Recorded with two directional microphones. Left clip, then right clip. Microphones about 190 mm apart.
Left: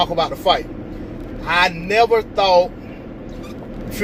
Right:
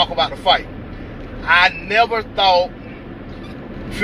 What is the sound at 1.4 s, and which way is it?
Speech, 35° left (ahead or behind).